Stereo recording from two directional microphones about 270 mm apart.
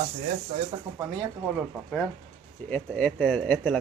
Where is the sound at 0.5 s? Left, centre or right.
Right.